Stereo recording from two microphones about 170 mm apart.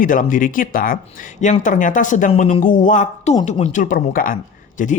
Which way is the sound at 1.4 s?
45° left (ahead or behind).